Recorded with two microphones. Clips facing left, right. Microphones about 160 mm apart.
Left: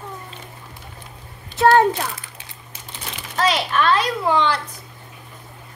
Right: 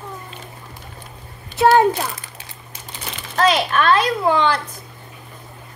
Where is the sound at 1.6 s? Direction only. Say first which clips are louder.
Right 1 dB; 10° right (ahead or behind).